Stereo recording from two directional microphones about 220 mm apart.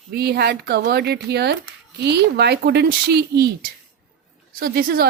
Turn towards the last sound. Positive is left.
turn(degrees=-40)  # may be behind; listen again after turning